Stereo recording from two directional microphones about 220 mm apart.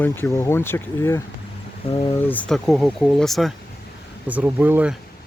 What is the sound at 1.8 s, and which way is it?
Speech, 25° left (ahead or behind).